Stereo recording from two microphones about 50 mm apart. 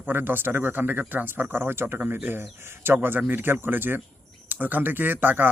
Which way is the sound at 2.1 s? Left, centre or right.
Right.